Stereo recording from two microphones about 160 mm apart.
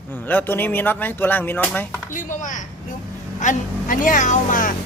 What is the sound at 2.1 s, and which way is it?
Speech, 55° left (ahead or behind).